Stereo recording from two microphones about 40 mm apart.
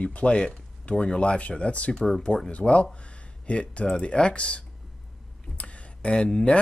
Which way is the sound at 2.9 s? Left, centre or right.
Left.